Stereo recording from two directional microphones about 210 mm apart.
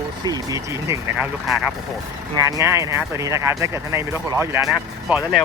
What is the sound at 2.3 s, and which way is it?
Speech, 15° right (ahead or behind).